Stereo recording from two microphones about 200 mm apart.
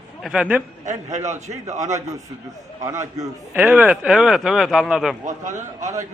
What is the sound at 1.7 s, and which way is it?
Speech, 35° right (ahead or behind).